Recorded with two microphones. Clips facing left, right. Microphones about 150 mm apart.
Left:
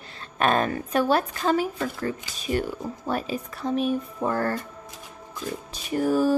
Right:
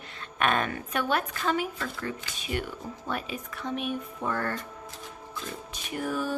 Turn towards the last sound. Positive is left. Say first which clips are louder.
# left 9 dB
turn(degrees=35)  # may be behind; listen again after turning